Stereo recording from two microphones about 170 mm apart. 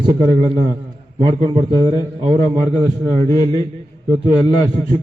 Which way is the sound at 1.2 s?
25° right (ahead or behind).